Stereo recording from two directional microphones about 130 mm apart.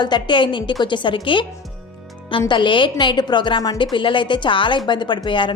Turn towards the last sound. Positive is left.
turn(degrees=40)  # may be behind; listen again after turning